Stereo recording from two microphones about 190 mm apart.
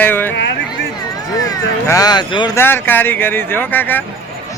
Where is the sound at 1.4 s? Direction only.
15° left (ahead or behind).